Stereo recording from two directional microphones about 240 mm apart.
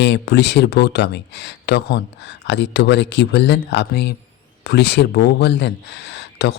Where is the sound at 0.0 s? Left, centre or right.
Left.